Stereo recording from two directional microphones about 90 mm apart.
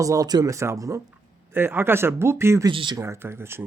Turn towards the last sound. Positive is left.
turn(degrees=-25)  # may be behind; listen again after turning